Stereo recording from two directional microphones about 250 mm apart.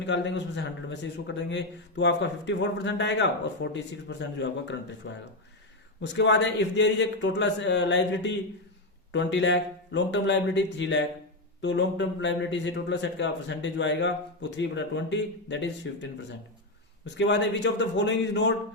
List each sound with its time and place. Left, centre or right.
0.0 s speech: left
17.2 s speech: left